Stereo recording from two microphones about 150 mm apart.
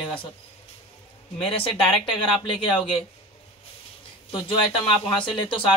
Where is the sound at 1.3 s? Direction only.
40° left (ahead or behind).